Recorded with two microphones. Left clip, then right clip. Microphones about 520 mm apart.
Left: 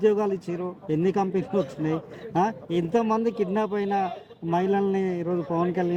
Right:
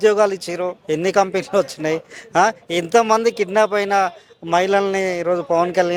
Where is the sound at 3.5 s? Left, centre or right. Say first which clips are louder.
Right 13 dB; right.